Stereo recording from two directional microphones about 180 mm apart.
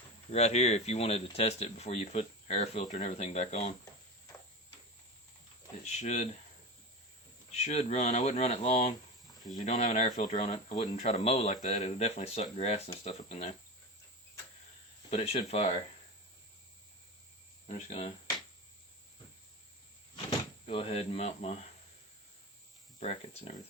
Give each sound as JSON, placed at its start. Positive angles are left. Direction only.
{"t": 0.3, "sound": "speech", "side_deg": 40}
{"t": 5.8, "sound": "speech", "side_deg": 40}
{"t": 7.5, "sound": "speech", "side_deg": 35}
{"t": 15.1, "sound": "speech", "side_deg": 35}
{"t": 17.7, "sound": "speech", "side_deg": 35}
{"t": 20.7, "sound": "speech", "side_deg": 30}
{"t": 23.0, "sound": "speech", "side_deg": 40}